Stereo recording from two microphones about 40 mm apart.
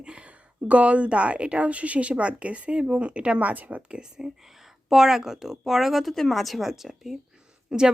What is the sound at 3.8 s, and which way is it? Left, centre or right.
Speech, right.